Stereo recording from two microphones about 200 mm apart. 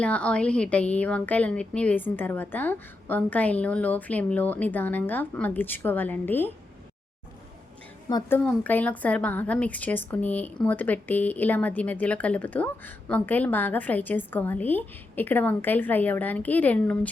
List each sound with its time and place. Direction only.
0.0 s a woman's voice: 5° left (ahead or behind)
8.1 s a woman's voice: 15° left (ahead or behind)